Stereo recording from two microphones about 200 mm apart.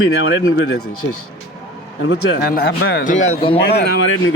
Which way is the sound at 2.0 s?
60° left (ahead or behind).